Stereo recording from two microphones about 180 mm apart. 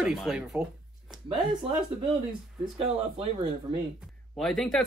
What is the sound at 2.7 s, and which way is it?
Speech, 35° right (ahead or behind).